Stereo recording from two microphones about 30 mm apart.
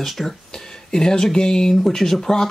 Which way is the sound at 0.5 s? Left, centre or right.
Left.